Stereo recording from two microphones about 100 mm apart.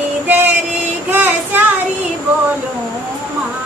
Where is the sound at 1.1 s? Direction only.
20° right (ahead or behind).